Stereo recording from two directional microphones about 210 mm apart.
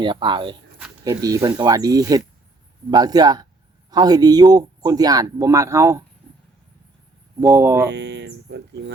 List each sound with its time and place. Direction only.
0.0 s speech: 20° right (ahead or behind)
7.4 s speech: 10° right (ahead or behind)
7.9 s speech: 55° right (ahead or behind)